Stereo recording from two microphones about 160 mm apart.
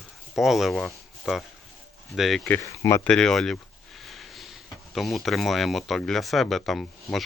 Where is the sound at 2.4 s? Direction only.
15° left (ahead or behind).